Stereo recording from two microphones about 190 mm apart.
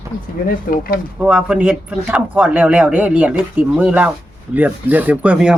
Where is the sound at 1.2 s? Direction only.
5° right (ahead or behind).